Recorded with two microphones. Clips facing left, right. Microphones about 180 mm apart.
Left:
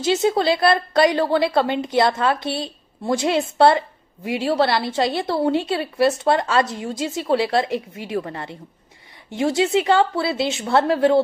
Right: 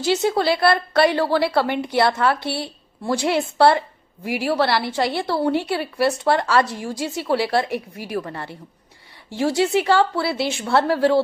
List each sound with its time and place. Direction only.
0.0 s a woman's voice: 20° left (ahead or behind)